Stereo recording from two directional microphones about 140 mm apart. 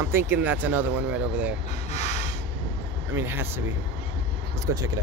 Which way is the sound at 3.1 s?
15° right (ahead or behind).